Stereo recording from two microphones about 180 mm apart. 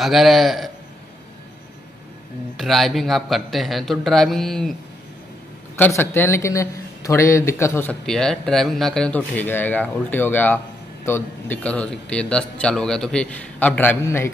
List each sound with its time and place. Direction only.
0.0 s a man's voice: centre (ahead or behind)
2.5 s a man's voice: centre (ahead or behind)
5.8 s a man's voice: 15° left (ahead or behind)
8.0 s a man's voice: 5° left (ahead or behind)